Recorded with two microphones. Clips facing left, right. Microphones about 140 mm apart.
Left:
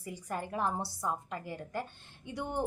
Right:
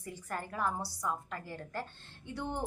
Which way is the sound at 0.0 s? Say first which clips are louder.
Left 2 dB; 15° left (ahead or behind).